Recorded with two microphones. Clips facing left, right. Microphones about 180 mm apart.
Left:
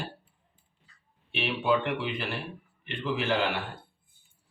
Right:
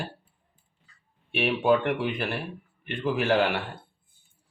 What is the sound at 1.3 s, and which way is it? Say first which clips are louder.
Speech: right 4 dB; 50° right (ahead or behind).